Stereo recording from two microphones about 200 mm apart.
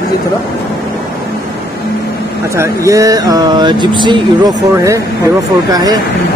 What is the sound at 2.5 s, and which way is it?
Speech, 15° right (ahead or behind).